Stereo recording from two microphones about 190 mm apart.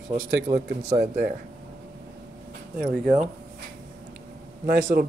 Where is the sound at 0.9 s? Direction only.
40° right (ahead or behind).